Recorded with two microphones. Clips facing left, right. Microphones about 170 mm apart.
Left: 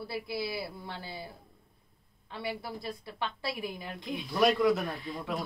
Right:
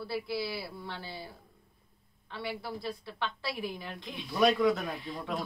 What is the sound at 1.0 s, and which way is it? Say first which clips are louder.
Speech: left 1 dB; 15° left (ahead or behind).